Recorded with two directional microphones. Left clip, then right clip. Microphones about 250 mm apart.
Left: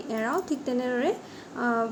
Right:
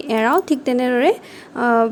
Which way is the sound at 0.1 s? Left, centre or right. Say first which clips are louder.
Right 12 dB; right.